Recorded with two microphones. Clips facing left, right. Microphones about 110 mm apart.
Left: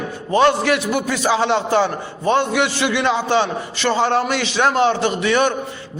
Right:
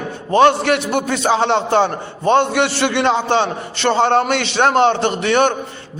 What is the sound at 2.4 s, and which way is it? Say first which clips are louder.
A man's voice: right 2 dB; 65° right (ahead or behind).